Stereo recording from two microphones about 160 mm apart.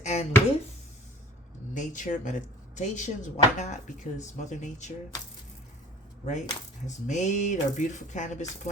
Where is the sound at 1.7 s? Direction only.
50° left (ahead or behind).